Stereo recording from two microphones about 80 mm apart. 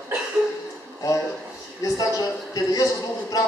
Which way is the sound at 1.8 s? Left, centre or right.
Left.